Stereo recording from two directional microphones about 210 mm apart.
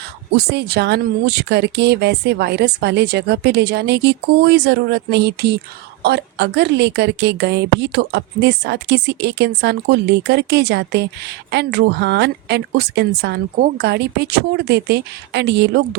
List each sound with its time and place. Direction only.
0.3 s a woman's voice: 50° right (ahead or behind)